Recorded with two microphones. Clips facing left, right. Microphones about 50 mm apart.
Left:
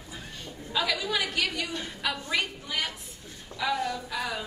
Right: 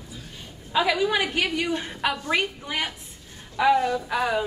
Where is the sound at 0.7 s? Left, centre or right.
Right.